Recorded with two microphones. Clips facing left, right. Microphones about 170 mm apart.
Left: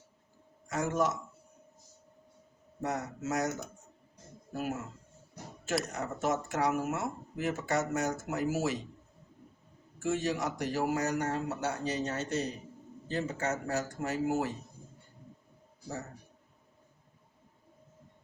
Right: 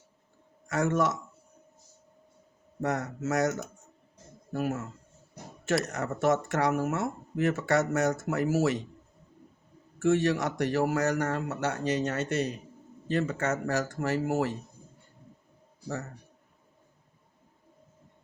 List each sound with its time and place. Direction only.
0.7 s speech: 75° right (ahead or behind)
2.8 s speech: 80° right
5.9 s speech: 75° right (ahead or behind)
10.0 s speech: 70° right (ahead or behind)